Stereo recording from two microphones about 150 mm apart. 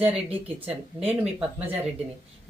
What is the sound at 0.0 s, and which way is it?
Speech, 40° right (ahead or behind).